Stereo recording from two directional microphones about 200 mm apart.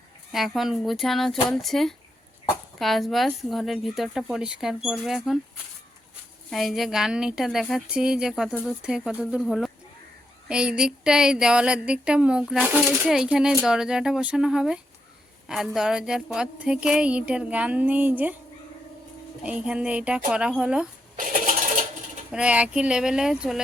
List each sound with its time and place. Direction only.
0.3 s a woman's voice: centre (ahead or behind)
6.5 s a woman's voice: centre (ahead or behind)
19.4 s a woman's voice: 5° right (ahead or behind)
21.2 s a sound: 40° right (ahead or behind)
22.3 s a woman's voice: 5° right (ahead or behind)